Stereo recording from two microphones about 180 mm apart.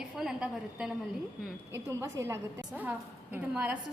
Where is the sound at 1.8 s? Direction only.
15° right (ahead or behind).